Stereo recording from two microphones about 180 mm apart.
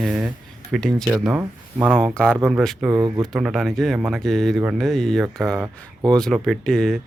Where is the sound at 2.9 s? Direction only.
20° right (ahead or behind).